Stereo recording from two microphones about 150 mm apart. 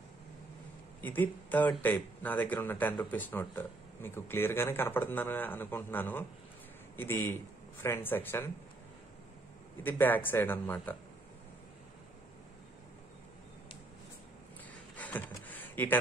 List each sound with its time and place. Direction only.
1.0 s speech: 10° left (ahead or behind)
9.8 s speech: 10° left (ahead or behind)
15.0 s a sound: 10° left (ahead or behind)